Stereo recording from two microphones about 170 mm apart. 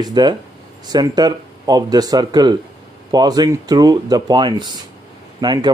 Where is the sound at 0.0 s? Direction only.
25° right (ahead or behind).